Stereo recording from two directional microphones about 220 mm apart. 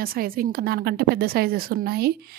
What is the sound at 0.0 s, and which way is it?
A woman's voice, 40° right (ahead or behind).